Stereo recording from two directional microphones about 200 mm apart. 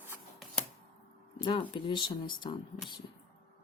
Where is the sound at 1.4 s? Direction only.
25° left (ahead or behind).